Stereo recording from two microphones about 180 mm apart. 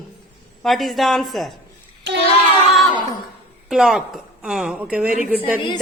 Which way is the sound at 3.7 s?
Centre (ahead or behind).